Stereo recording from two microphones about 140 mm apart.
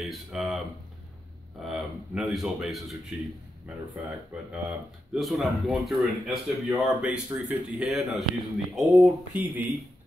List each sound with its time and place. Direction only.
0.0 s speech: centre (ahead or behind)
1.6 s a man's voice: centre (ahead or behind)
6.7 s a man's voice: 15° right (ahead or behind)